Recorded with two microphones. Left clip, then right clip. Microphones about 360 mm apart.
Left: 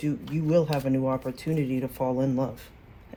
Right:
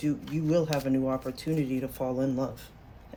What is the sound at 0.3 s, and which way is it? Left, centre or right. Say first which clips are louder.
Speech: left 4 dB; centre.